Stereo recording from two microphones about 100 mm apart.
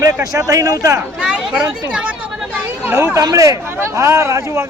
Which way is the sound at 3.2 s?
35° right (ahead or behind).